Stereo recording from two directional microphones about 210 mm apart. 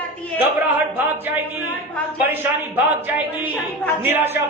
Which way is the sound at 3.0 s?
10° right (ahead or behind).